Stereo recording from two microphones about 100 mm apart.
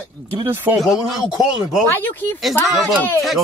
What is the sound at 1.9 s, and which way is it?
Speech, 20° left (ahead or behind).